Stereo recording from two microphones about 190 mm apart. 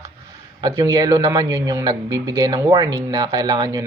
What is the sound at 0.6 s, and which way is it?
Speech, 15° right (ahead or behind).